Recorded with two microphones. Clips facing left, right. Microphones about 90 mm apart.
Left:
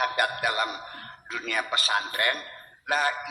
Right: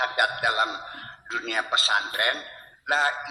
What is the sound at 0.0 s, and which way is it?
A man's voice, 25° right (ahead or behind).